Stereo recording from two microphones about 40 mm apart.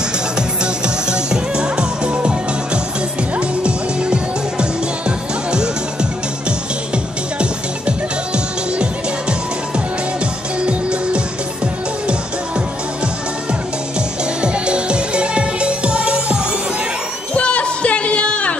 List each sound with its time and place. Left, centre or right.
0.8 s music: right
10.6 s music: right
14.4 s music: right
17.3 s music: left